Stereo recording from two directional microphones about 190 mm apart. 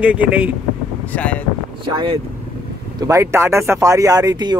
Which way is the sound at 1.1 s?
5° left (ahead or behind).